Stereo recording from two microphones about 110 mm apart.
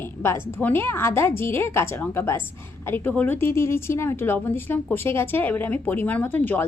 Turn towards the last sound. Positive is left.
turn(degrees=15)  # may be behind; listen again after turning